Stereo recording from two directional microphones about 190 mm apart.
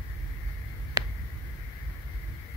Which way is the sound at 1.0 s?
20° right (ahead or behind).